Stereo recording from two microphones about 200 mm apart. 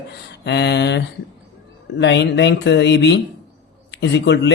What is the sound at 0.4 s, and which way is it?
Speech, 60° left (ahead or behind).